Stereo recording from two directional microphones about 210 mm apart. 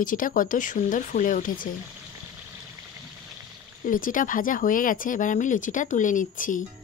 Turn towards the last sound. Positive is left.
turn(degrees=40)  # may be behind; listen again after turning